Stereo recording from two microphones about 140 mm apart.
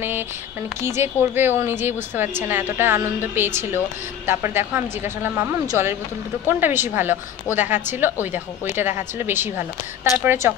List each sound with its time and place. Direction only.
0.7 s a woman's voice: 20° right (ahead or behind)